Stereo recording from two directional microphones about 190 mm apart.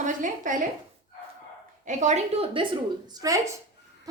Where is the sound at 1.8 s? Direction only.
40° right (ahead or behind).